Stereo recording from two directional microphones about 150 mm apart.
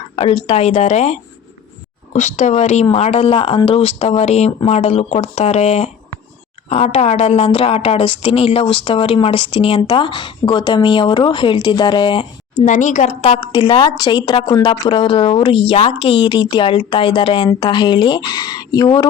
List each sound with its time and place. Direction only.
0.2 s a woman's voice: 40° left (ahead or behind)
12.6 s a woman's voice: 55° left (ahead or behind)
13.2 s a woman's voice: 35° left (ahead or behind)